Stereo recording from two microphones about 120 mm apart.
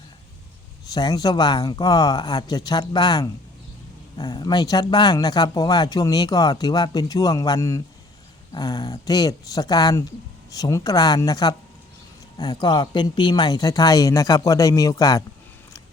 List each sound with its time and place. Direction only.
0.9 s speech: 35° left (ahead or behind)